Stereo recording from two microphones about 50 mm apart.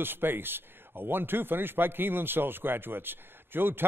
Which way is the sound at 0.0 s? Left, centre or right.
Right.